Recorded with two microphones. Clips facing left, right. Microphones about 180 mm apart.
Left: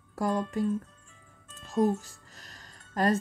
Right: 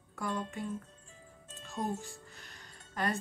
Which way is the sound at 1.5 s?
40° left (ahead or behind).